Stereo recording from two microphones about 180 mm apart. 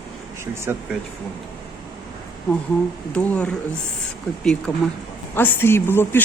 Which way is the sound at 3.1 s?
5° left (ahead or behind).